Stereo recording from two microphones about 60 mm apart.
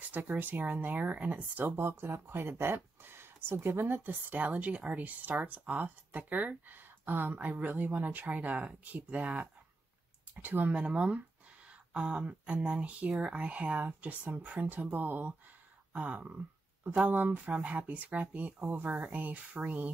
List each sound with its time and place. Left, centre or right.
0.1 s a woman's voice: right
1.8 s a woman's voice: right
10.7 s a woman's voice: centre